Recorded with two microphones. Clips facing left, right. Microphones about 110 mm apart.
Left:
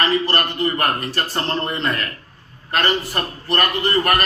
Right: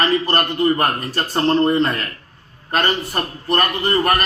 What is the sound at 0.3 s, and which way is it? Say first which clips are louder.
A man's voice: right 4 dB; 25° right (ahead or behind).